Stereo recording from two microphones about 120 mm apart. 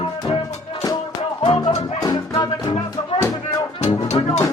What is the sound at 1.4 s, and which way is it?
Music, 45° left (ahead or behind).